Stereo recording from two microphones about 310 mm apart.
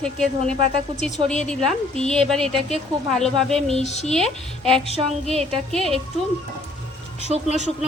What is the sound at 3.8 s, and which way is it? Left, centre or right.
Speech, left.